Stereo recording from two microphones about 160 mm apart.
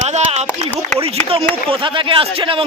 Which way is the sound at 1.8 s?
30° right (ahead or behind).